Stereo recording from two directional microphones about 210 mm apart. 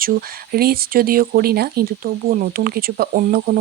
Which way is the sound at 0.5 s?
45° right (ahead or behind).